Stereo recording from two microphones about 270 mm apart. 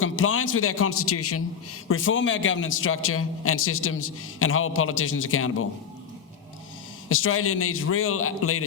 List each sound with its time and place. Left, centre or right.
0.0 s a man's voice: left
7.1 s a man's voice: left